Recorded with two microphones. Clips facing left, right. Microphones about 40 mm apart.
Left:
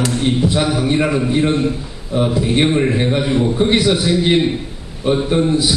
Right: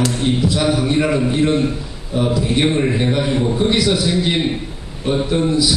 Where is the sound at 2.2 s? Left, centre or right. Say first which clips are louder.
Left 1 dB; left.